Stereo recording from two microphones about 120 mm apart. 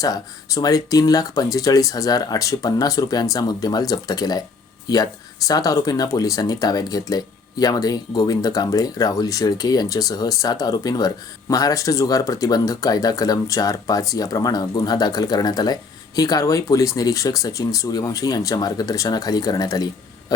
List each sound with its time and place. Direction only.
0.0 s speech: 30° left (ahead or behind)
5.5 s speech: 30° left (ahead or behind)